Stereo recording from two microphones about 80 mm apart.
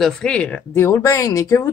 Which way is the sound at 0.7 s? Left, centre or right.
Left.